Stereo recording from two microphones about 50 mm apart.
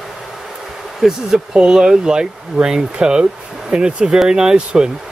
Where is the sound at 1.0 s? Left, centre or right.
Centre.